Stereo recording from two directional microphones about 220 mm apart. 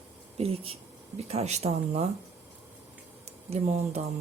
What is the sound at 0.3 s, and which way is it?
Speech, 25° right (ahead or behind).